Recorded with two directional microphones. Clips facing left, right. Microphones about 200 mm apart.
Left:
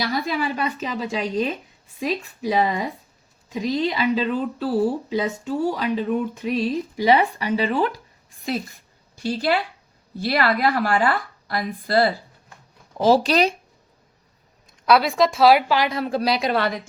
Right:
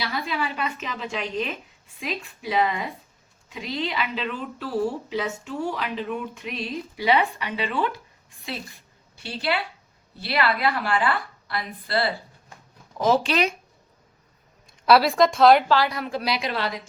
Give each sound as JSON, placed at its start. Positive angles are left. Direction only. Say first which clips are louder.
{"t": 0.0, "sound": "speech", "louder": "left 4 dB", "side_deg": 40}
{"t": 9.1, "sound": "a woman's voice", "louder": "left 5 dB", "side_deg": 40}
{"t": 14.8, "sound": "a woman's voice", "louder": "even", "side_deg": 0}
{"t": 15.8, "sound": "speech", "louder": "left 2 dB", "side_deg": 25}
{"t": 16.0, "sound": "speech", "louder": "left 5 dB", "side_deg": 35}